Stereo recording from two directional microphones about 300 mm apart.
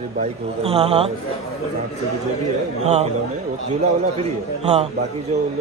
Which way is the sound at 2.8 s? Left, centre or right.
Right.